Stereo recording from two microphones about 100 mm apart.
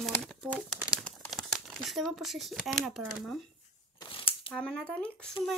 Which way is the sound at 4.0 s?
60° left (ahead or behind).